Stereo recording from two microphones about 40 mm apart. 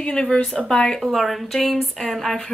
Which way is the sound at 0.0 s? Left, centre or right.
Centre.